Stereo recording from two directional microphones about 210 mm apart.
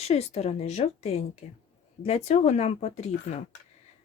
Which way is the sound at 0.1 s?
30° left (ahead or behind).